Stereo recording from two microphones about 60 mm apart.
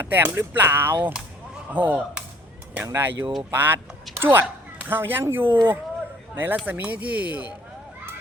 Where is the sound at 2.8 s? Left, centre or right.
Right.